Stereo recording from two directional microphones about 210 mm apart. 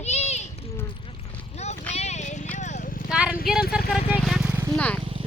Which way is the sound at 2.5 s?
35° left (ahead or behind).